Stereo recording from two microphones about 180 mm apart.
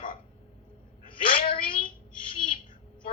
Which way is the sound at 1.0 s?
30° left (ahead or behind).